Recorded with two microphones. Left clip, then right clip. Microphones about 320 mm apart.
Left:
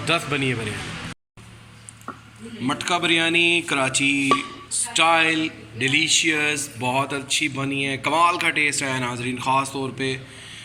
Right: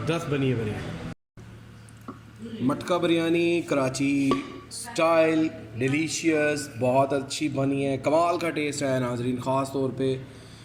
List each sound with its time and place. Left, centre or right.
0.0 s a man's voice: centre
2.7 s a man's voice: centre